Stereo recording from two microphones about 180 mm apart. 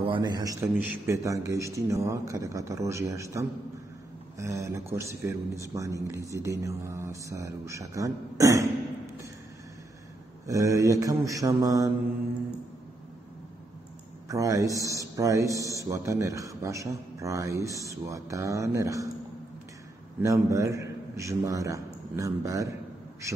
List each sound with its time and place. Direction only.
0.0 s a man's voice: 25° right (ahead or behind)
10.4 s mantra: 20° right (ahead or behind)
14.3 s mantra: 20° right (ahead or behind)
14.8 s a man's voice: 20° right (ahead or behind)
20.2 s a man's voice: 15° right (ahead or behind)